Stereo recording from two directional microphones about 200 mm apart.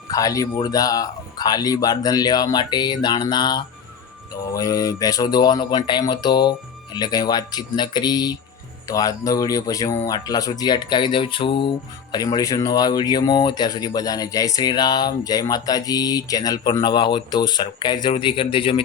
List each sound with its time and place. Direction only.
0.1 s speech: 15° left (ahead or behind)